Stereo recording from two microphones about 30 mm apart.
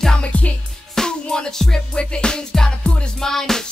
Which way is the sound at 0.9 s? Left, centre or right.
Left.